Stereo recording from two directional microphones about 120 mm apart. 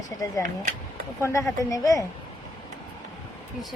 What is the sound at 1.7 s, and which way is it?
Speech, 30° left (ahead or behind).